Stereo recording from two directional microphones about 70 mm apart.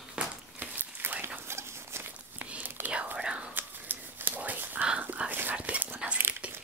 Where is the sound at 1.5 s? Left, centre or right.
Right.